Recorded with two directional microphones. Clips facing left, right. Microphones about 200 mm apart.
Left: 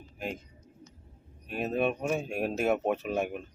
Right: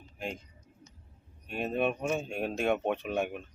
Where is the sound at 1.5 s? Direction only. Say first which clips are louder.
Left 1 dB; centre (ahead or behind).